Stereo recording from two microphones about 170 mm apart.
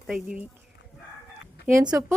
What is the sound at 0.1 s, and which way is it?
Speech, 5° right (ahead or behind).